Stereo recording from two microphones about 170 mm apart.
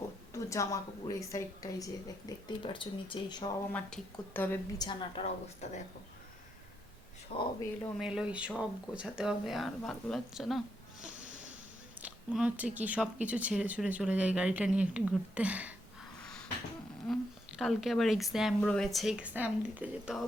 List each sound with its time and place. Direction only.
0.3 s a woman's voice: 20° left (ahead or behind)
3.7 s speech: 5° left (ahead or behind)
4.8 s a woman's voice: 25° left (ahead or behind)
7.3 s speech: 35° left (ahead or behind)
7.9 s speech: 5° right (ahead or behind)
11.2 s a sound: 45° right (ahead or behind)
12.0 s speech: 5° right (ahead or behind)
16.2 s a sound: 5° left (ahead or behind)
17.6 s speech: centre (ahead or behind)